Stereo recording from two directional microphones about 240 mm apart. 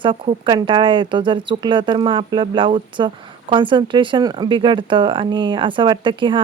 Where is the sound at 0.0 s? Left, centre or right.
Right.